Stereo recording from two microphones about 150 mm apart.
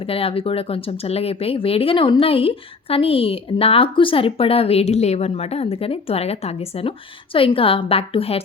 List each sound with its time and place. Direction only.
0.0 s speech: 40° left (ahead or behind)